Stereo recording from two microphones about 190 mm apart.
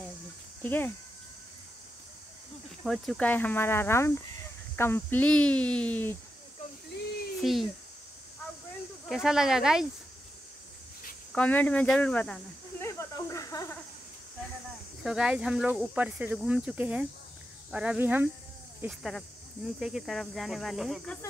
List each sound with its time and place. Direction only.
0.6 s speech: 10° left (ahead or behind)
2.8 s speech: centre (ahead or behind)
7.3 s speech: centre (ahead or behind)
9.1 s speech: centre (ahead or behind)
11.3 s speech: 5° left (ahead or behind)
12.8 s snake: 15° left (ahead or behind)
15.0 s speech: 5° right (ahead or behind)